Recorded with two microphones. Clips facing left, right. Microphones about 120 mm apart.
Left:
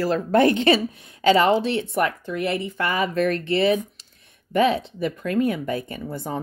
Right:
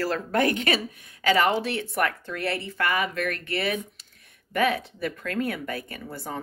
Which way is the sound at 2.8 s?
30° left (ahead or behind).